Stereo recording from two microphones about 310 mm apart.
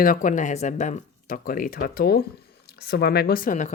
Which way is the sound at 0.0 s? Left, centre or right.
Left.